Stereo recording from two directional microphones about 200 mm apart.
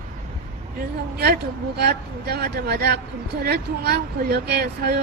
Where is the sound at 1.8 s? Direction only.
50° right (ahead or behind).